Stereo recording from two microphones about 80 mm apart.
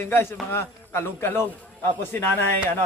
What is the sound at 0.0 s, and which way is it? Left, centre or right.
A woman's voice, left.